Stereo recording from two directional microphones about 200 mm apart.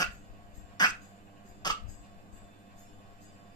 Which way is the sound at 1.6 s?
20° left (ahead or behind).